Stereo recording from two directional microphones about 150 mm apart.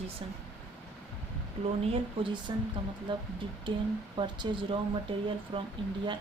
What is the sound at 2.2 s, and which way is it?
A woman's voice, 30° right (ahead or behind).